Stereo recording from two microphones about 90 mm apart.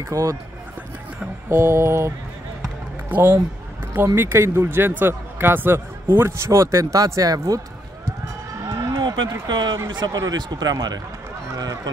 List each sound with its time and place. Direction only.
0.0 s mantra: 35° right (ahead or behind)
1.5 s mantra: 30° right (ahead or behind)
3.1 s a man's voice: 25° right (ahead or behind); by 7.6 s 40° right (ahead or behind)
8.6 s a sound: 40° right (ahead or behind)
8.9 s a sound: 60° right (ahead or behind)
9.5 s speech: 55° right (ahead or behind)
11.5 s mantra: 40° right (ahead or behind)